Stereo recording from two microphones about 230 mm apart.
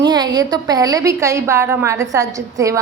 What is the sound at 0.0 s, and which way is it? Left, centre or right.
A woman's voice, centre.